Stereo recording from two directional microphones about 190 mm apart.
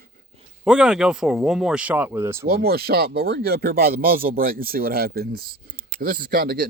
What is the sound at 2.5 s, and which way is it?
Speech, 55° right (ahead or behind).